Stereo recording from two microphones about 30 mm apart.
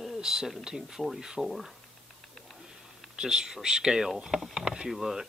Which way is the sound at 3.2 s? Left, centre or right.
Right.